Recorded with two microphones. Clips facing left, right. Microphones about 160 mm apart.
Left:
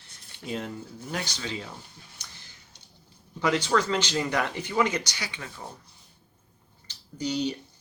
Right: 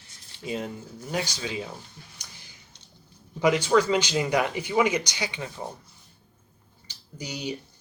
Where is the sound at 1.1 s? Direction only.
10° right (ahead or behind).